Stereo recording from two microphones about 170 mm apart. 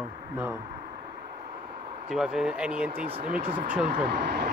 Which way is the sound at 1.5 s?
55° right (ahead or behind).